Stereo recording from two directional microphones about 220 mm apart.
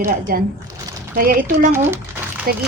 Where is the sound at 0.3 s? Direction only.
40° right (ahead or behind).